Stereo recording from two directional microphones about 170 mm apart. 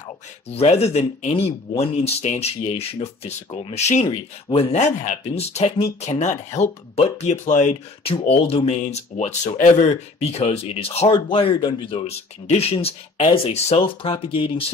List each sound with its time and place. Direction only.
0.6 s speech: 35° left (ahead or behind)